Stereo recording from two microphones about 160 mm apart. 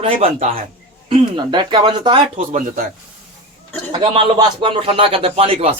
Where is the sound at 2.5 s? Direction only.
55° right (ahead or behind).